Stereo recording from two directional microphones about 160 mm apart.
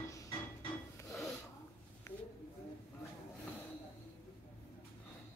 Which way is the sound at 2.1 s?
15° left (ahead or behind).